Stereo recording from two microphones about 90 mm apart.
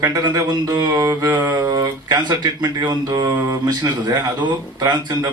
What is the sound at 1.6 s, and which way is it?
Speech, 40° right (ahead or behind).